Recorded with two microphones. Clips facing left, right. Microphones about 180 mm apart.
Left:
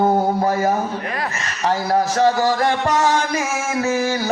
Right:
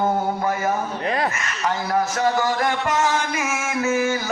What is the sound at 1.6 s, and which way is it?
Speech, 35° left (ahead or behind).